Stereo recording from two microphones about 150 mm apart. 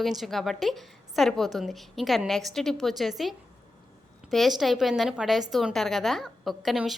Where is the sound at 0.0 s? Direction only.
Centre (ahead or behind).